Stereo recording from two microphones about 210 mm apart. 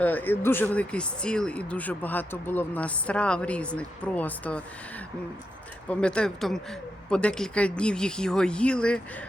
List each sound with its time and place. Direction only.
0.0 s speech: 10° left (ahead or behind)